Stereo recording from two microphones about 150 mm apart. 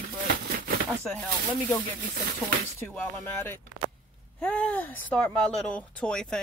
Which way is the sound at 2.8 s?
15° left (ahead or behind).